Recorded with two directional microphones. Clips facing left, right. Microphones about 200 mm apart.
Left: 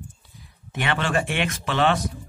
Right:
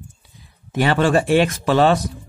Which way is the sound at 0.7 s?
40° right (ahead or behind).